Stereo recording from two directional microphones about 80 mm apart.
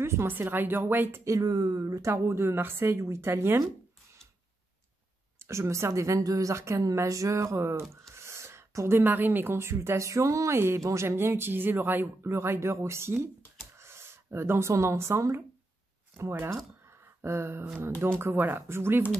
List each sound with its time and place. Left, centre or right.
0.0 s speech: right
1.2 s speech: right
5.4 s speech: right